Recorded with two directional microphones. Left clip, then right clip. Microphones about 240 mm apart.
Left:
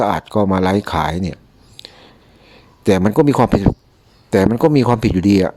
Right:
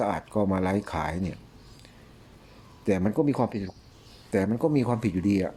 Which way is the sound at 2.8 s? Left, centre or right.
Left.